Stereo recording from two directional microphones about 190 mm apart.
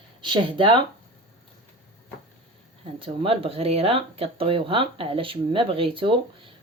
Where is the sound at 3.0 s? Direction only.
30° right (ahead or behind).